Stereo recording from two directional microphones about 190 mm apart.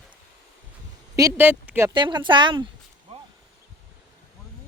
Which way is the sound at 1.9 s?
25° right (ahead or behind).